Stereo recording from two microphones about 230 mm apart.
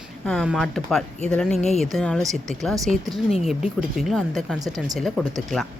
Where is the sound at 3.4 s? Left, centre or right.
Centre.